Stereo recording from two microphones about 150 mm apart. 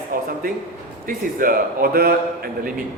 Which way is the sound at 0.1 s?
70° right (ahead or behind).